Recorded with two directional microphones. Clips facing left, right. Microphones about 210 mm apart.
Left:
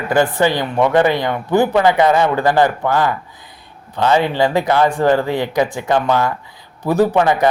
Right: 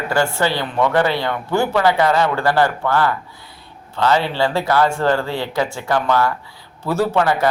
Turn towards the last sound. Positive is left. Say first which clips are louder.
# left 4 dB
turn(degrees=20)  # may be behind; listen again after turning